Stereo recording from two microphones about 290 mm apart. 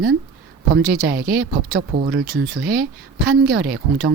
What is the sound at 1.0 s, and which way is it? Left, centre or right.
Speech, right.